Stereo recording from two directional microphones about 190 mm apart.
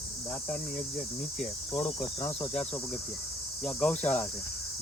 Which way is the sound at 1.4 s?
5° left (ahead or behind).